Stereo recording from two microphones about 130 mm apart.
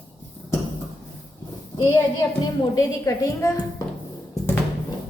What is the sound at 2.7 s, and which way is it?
Speech, 25° left (ahead or behind).